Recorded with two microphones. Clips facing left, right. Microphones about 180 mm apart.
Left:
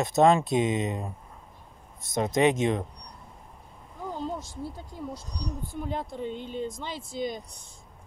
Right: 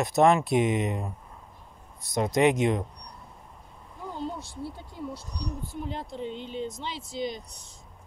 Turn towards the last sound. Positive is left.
turn(degrees=50)  # may be behind; listen again after turning